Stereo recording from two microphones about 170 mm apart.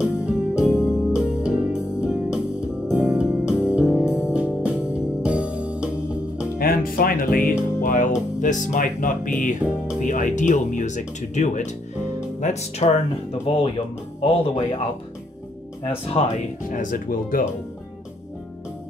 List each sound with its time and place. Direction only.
0.0 s music: 5° right (ahead or behind)
0.7 s music: 15° left (ahead or behind)
1.1 s music: 5° right (ahead or behind)
6.6 s music: 60° left (ahead or behind)
8.4 s speech: 50° left (ahead or behind); by 14.8 s 35° left (ahead or behind)
15.8 s speech: 35° left (ahead or behind)
16.7 s speech: 50° left (ahead or behind)